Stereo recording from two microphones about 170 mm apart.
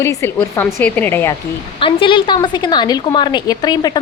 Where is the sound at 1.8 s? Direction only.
30° left (ahead or behind).